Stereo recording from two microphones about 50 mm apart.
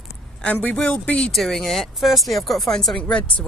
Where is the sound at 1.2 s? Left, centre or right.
Centre.